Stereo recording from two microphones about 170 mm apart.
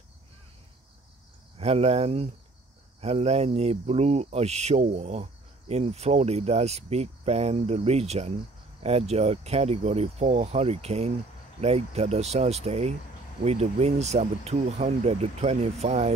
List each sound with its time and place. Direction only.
1.6 s speech: 40° right (ahead or behind)